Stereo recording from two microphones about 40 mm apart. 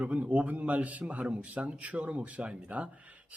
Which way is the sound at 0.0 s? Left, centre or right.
Right.